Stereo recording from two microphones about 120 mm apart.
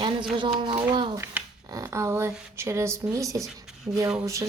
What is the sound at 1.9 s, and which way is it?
A woman's voice, 25° right (ahead or behind).